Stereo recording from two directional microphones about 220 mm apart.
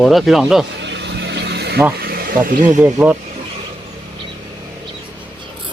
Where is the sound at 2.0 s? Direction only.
45° right (ahead or behind).